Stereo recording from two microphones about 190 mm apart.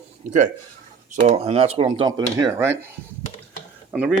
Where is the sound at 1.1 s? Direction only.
35° right (ahead or behind).